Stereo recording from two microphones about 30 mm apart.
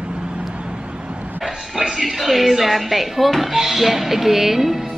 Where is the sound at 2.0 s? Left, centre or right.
Centre.